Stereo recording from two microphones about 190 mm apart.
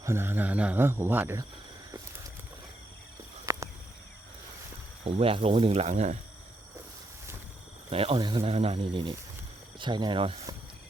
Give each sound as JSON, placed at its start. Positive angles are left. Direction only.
{"t": 0.0, "sound": "speech", "side_deg": -15}
{"t": 3.4, "sound": "a sound", "side_deg": -15}
{"t": 5.0, "sound": "speech", "side_deg": -30}
{"t": 7.9, "sound": "speech", "side_deg": -30}